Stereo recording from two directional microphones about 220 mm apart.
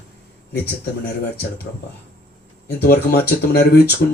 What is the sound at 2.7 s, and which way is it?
Speech, 45° left (ahead or behind).